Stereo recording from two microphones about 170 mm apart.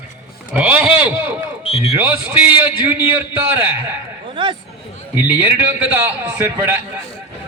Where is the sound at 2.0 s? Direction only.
10° right (ahead or behind).